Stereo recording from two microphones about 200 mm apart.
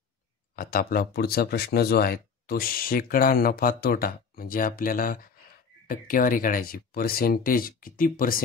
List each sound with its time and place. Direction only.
0.6 s speech: 45° left (ahead or behind)